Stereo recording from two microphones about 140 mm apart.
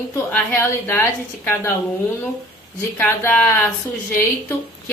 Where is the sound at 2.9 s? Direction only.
15° left (ahead or behind).